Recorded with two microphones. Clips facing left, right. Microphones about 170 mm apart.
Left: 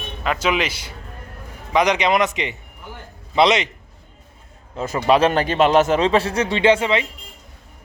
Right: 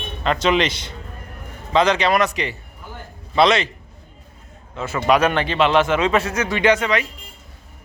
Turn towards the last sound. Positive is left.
turn(degrees=25)  # may be behind; listen again after turning